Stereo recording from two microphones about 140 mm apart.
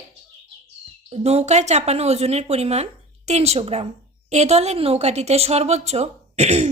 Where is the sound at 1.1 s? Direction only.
50° right (ahead or behind).